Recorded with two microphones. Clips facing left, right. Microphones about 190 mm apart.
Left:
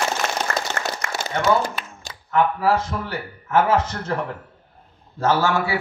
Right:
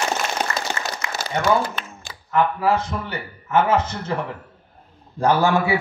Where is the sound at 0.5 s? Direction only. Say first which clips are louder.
Left 1 dB; 50° left (ahead or behind).